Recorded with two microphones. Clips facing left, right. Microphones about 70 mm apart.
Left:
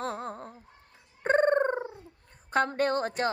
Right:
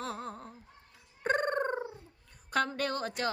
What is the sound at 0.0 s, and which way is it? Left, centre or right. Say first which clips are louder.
Music: left 4 dB; left.